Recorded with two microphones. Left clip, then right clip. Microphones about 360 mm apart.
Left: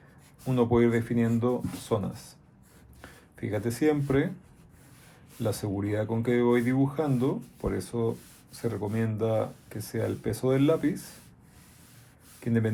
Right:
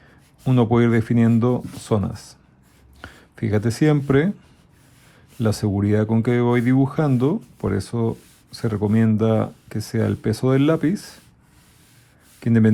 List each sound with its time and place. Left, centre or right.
0.4 s speech: right
5.4 s speech: right
12.4 s speech: right